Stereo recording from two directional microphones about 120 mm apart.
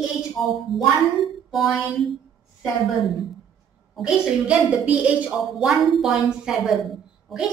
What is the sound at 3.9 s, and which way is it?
A woman's voice, 5° right (ahead or behind).